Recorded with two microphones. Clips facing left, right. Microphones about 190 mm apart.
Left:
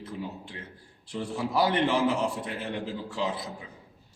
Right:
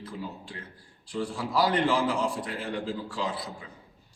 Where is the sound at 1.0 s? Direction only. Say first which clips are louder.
Even; 20° left (ahead or behind).